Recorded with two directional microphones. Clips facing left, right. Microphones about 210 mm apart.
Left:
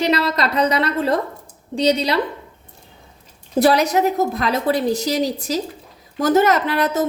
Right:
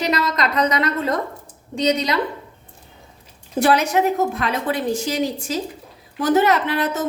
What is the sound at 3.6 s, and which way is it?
A woman's voice, 35° left (ahead or behind).